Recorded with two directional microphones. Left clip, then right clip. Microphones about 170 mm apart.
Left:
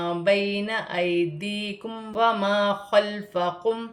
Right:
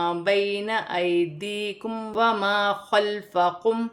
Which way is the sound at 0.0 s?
25° right (ahead or behind).